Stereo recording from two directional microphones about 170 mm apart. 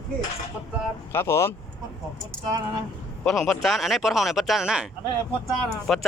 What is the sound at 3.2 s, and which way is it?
Speech, centre (ahead or behind).